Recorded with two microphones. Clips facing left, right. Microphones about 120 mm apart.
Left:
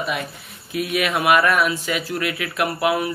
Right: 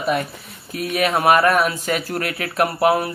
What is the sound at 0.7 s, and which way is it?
Speech, 40° right (ahead or behind).